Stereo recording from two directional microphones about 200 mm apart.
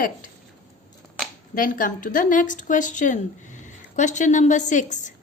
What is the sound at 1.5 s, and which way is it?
Speech, 45° left (ahead or behind).